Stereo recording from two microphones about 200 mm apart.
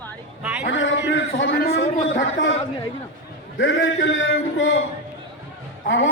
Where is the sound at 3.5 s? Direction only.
65° left (ahead or behind).